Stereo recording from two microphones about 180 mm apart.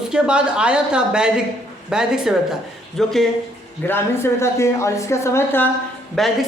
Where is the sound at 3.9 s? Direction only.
15° left (ahead or behind).